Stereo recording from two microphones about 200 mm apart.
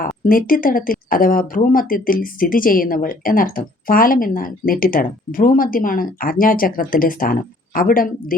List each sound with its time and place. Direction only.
0.3 s speech: 45° left (ahead or behind)